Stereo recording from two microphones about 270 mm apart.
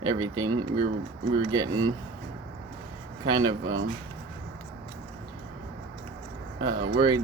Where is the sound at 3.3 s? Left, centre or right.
Centre.